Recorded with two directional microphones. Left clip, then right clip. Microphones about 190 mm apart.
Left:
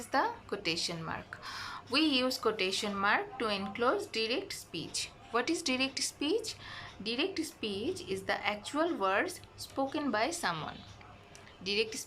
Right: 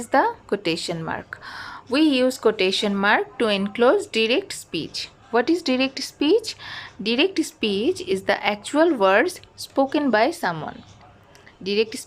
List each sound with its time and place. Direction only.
0.1 s a woman's voice: 45° right (ahead or behind)